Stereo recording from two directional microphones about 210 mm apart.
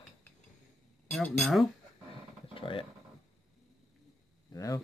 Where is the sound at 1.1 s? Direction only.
5° left (ahead or behind).